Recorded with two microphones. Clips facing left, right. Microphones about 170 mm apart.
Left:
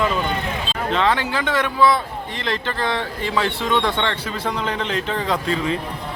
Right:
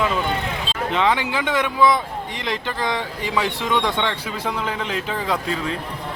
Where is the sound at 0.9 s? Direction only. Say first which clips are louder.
Even; 15° right (ahead or behind).